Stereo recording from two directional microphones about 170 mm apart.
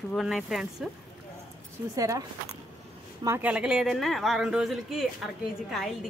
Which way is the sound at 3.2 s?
15° right (ahead or behind).